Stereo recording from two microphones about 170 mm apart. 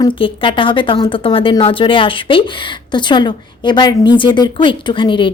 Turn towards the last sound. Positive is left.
turn(degrees=30)  # may be behind; listen again after turning